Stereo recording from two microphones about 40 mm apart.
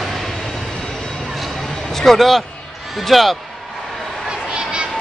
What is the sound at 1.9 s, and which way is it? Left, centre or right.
Speech, centre.